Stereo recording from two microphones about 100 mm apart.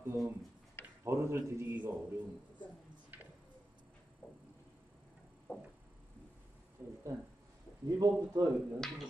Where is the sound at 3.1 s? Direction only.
20° right (ahead or behind).